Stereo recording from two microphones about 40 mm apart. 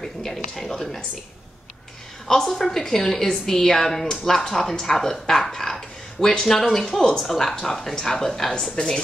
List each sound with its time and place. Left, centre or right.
0.0 s a woman's voice: centre
2.2 s a woman's voice: centre